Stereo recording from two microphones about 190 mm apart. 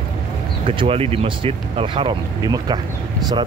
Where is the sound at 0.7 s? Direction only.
30° right (ahead or behind).